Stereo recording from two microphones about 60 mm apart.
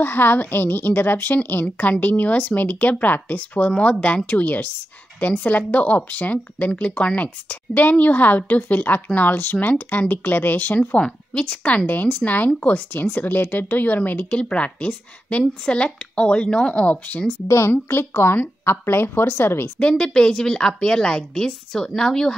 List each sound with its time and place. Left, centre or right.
0.0 s a woman's voice: left
10.9 s a woman's voice: centre
17.5 s a woman's voice: left
19.8 s a woman's voice: centre